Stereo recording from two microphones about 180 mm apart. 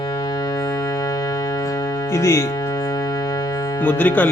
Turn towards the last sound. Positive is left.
turn(degrees=10)  # may be behind; listen again after turning